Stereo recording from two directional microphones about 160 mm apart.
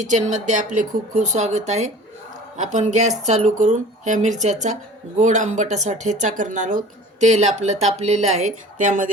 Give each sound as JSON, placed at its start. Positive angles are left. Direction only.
{"t": 0.0, "sound": "speech", "side_deg": -50}